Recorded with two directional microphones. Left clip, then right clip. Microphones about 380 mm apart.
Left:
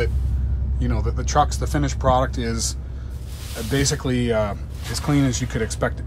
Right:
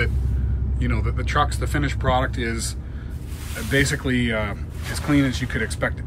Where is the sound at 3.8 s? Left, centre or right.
Centre.